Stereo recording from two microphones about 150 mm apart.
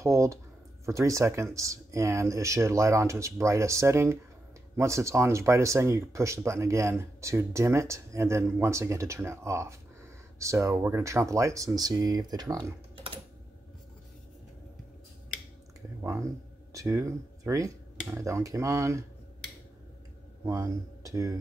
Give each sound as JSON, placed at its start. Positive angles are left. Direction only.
{"t": 0.0, "sound": "speech", "side_deg": -20}
{"t": 16.0, "sound": "speech", "side_deg": -20}
{"t": 20.4, "sound": "speech", "side_deg": -20}